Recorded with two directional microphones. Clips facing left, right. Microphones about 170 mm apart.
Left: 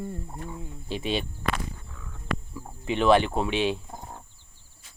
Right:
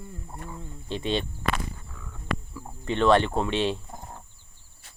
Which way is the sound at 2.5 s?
5° left (ahead or behind).